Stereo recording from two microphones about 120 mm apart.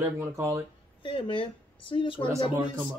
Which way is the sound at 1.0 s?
45° left (ahead or behind).